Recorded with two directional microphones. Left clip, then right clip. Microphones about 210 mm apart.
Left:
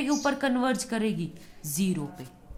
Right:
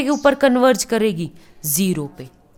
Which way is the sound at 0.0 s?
45° right (ahead or behind).